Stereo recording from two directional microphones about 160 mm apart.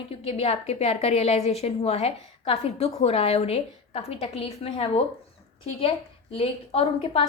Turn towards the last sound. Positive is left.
turn(degrees=35)  # may be behind; listen again after turning